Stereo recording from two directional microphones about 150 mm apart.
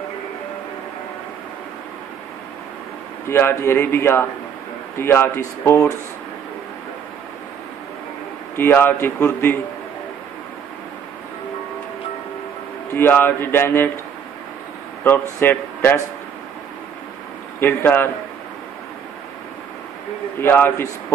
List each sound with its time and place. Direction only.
3.3 s a man's voice: 15° left (ahead or behind)
8.5 s a man's voice: 15° left (ahead or behind)
12.9 s a man's voice: 15° left (ahead or behind)
15.0 s a man's voice: 15° left (ahead or behind)
17.6 s a man's voice: 15° left (ahead or behind)
20.3 s a man's voice: 15° left (ahead or behind)